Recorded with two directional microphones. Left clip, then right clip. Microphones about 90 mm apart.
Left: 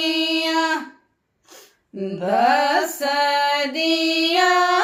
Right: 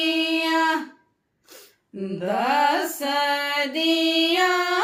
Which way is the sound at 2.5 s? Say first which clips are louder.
Left 2 dB; 45° right (ahead or behind).